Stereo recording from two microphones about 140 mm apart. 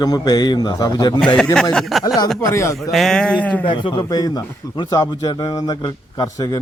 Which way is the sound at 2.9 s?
Centre (ahead or behind).